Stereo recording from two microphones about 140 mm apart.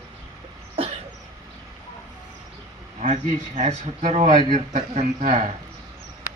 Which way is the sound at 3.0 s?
60° right (ahead or behind).